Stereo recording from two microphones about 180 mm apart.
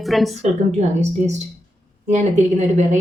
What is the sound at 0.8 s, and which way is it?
A woman's voice, 40° right (ahead or behind).